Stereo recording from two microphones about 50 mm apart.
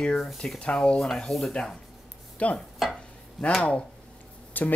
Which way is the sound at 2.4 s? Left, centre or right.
Left.